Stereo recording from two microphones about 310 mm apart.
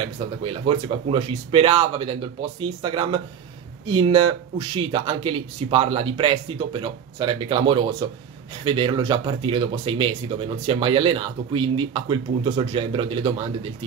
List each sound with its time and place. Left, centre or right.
0.4 s speech: centre